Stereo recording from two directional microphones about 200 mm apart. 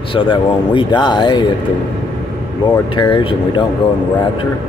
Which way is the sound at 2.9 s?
25° left (ahead or behind).